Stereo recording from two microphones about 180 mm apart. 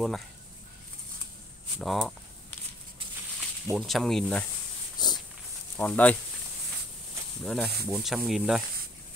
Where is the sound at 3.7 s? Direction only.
Centre (ahead or behind).